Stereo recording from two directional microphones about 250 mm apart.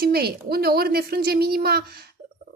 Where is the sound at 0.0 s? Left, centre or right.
Right.